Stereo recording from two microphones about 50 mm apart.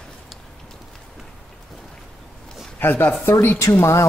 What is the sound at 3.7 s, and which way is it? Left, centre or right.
Speech, left.